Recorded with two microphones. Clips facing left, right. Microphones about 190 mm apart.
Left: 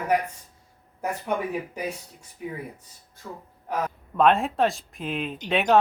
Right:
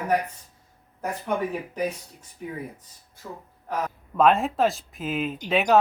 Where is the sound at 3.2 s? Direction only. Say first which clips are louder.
Even; 5° right (ahead or behind).